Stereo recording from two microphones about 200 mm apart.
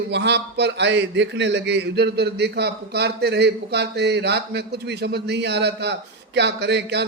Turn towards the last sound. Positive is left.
turn(degrees=-60)  # may be behind; listen again after turning